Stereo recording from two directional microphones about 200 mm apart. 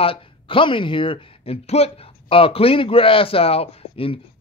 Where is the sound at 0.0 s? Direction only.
25° left (ahead or behind).